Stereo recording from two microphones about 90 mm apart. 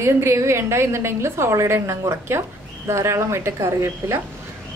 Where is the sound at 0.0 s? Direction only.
30° right (ahead or behind).